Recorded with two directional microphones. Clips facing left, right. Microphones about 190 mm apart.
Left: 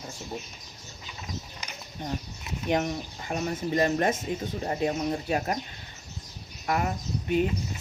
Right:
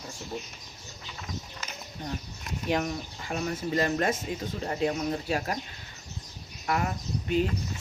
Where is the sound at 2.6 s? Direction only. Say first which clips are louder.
Left 2 dB; 25° left (ahead or behind).